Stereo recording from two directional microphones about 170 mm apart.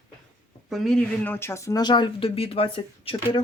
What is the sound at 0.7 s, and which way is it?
Speech, centre (ahead or behind).